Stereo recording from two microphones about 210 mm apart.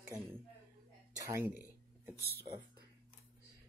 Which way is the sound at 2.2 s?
50° right (ahead or behind).